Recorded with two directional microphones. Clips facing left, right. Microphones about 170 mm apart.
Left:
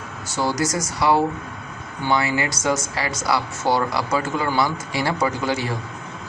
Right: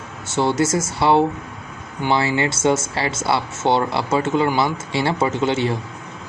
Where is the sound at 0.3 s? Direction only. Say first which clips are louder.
Right 4 dB; 25° right (ahead or behind).